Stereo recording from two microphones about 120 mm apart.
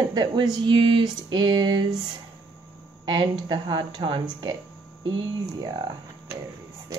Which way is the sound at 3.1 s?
40° right (ahead or behind).